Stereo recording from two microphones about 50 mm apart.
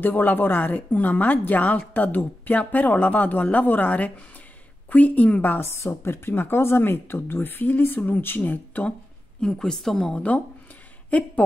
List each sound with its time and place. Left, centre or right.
0.0 s speech: left
5.6 s speech: left
8.4 s speech: left
9.4 s a woman's voice: centre
11.1 s speech: left